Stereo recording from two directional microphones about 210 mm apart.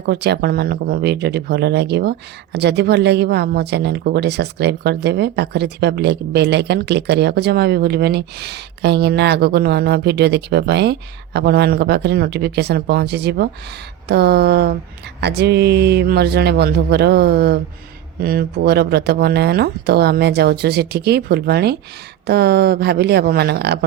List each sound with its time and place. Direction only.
0.0 s speech: 50° right (ahead or behind)